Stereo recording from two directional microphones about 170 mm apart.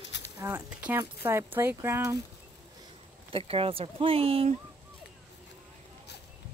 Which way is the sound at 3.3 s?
35° right (ahead or behind).